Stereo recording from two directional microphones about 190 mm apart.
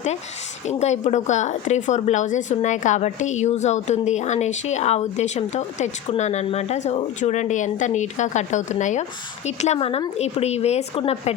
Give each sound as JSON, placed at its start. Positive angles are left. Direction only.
{"t": 0.7, "sound": "speech", "side_deg": 35}